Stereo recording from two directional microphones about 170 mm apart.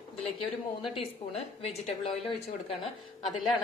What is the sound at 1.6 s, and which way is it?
Speech, 35° left (ahead or behind).